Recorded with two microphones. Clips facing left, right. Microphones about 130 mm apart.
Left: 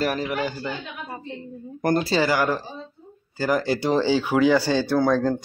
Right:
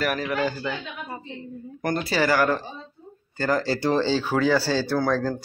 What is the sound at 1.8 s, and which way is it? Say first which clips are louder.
Speech: left 5 dB; 35° left (ahead or behind).